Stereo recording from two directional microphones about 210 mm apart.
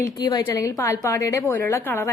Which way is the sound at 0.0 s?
20° left (ahead or behind).